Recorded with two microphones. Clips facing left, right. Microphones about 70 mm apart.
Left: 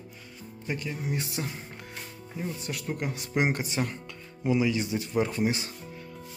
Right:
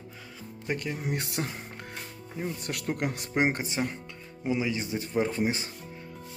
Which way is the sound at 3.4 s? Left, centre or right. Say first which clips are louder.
Right 1 dB; right.